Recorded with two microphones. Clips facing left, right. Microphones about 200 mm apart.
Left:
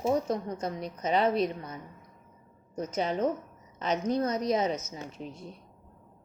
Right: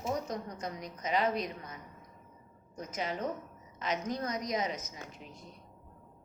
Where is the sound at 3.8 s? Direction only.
30° left (ahead or behind).